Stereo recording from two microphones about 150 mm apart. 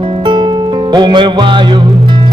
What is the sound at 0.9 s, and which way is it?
Music, 30° right (ahead or behind).